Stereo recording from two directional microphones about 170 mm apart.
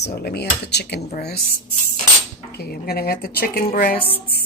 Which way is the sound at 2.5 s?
70° left (ahead or behind).